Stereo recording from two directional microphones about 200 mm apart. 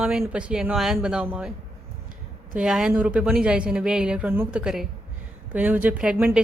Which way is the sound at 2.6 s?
5° right (ahead or behind).